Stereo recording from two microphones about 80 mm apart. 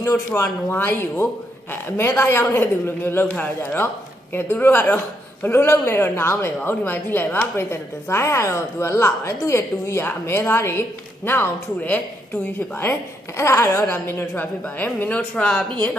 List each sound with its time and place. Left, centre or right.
0.0 s a woman's voice: left
13.4 s a woman's voice: left
13.9 s speech: left